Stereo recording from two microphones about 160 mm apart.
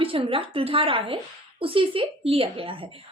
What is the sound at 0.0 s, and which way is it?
Speech, 35° right (ahead or behind).